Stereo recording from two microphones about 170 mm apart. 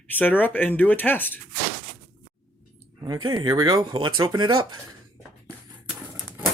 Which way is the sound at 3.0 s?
25° right (ahead or behind).